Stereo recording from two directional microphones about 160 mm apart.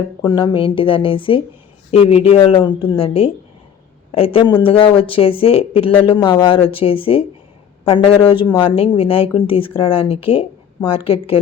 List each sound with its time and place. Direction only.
0.3 s speech: 30° left (ahead or behind)